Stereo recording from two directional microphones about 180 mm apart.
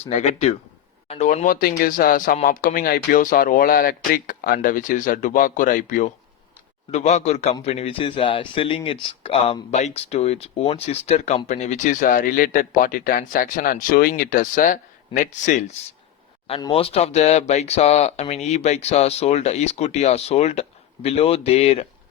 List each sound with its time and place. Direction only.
0.0 s speech: 35° left (ahead or behind)
16.5 s speech: 25° left (ahead or behind)